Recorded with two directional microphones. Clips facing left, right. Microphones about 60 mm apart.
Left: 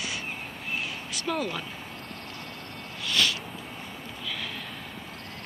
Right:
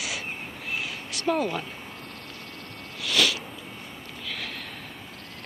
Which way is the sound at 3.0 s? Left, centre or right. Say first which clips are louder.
Right 2 dB; right.